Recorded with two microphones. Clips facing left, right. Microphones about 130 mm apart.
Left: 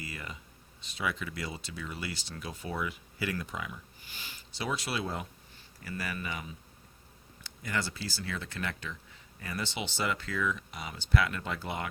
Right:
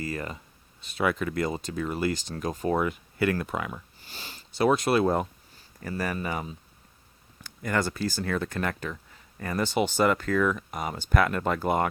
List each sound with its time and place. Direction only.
0.0 s speech: 45° right (ahead or behind)
0.8 s speech: 55° right (ahead or behind)
4.0 s sniff: 40° right (ahead or behind)
4.6 s speech: 50° right (ahead or behind)